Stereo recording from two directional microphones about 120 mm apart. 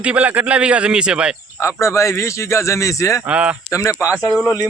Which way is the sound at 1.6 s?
25° left (ahead or behind).